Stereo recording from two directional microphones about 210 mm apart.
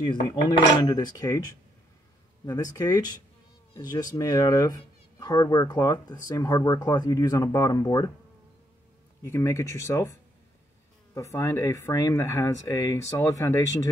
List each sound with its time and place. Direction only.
0.1 s cutlery: 20° left (ahead or behind)
0.8 s speech: 20° left (ahead or behind)
9.2 s speech: 15° left (ahead or behind)
11.1 s speech: 15° left (ahead or behind)